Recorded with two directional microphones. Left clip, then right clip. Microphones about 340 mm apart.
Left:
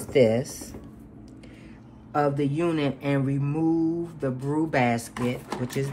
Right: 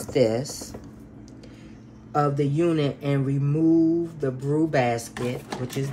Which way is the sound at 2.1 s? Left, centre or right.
Left.